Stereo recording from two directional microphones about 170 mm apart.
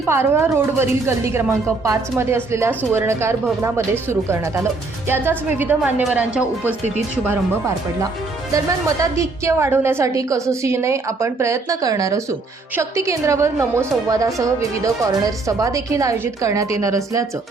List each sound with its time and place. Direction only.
0.1 s speech: 15° right (ahead or behind)
8.5 s a woman's voice: 20° right (ahead or behind)